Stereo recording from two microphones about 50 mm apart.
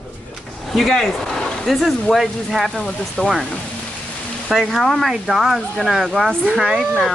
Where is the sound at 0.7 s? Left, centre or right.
Centre.